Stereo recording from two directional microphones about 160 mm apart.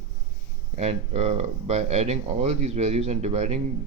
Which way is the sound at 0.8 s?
45° right (ahead or behind).